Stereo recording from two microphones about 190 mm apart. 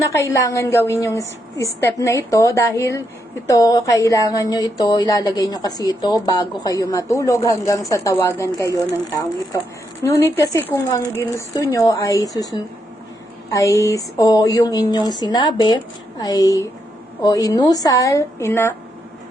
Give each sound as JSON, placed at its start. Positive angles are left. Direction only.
{"t": 0.0, "sound": "a woman's voice", "side_deg": 15}
{"t": 10.0, "sound": "a woman's voice", "side_deg": 15}